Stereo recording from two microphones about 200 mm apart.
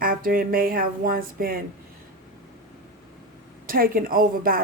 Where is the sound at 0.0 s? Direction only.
45° right (ahead or behind).